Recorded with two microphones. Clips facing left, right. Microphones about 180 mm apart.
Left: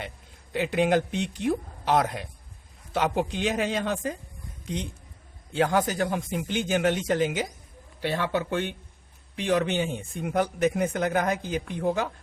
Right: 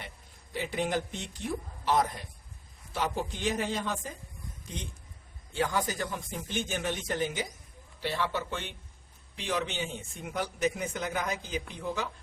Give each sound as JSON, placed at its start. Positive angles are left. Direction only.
{"t": 0.5, "sound": "speech", "side_deg": 75}
{"t": 5.5, "sound": "speech", "side_deg": 70}
{"t": 8.0, "sound": "a man's voice", "side_deg": 55}